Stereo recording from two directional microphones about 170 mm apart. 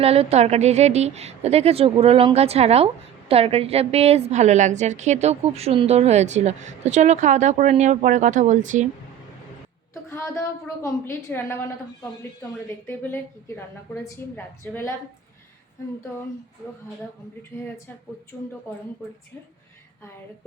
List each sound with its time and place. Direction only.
0.0 s a woman's voice: 35° right (ahead or behind)
10.1 s a woman's voice: 15° left (ahead or behind)
12.9 s a woman's voice: 10° left (ahead or behind)